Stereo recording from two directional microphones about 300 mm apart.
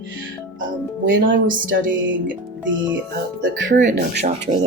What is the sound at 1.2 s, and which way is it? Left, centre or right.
Speech, right.